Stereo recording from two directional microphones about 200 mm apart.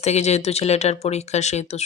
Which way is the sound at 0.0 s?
35° left (ahead or behind).